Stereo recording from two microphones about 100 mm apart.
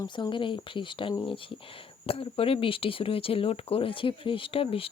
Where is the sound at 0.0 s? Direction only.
50° left (ahead or behind).